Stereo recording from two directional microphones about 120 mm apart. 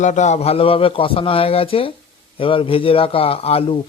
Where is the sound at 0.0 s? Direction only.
85° left.